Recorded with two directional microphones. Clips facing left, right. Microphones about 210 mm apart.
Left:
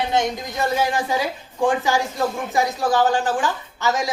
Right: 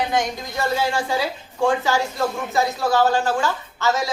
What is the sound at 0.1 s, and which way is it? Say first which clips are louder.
A woman's voice: left 1 dB; 15° left (ahead or behind).